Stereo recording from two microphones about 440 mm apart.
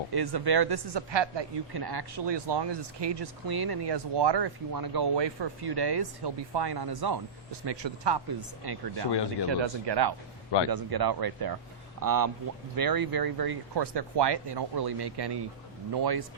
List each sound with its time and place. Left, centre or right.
0.1 s speech: right
7.6 s speech: right
9.1 s speech: left
9.5 s speech: right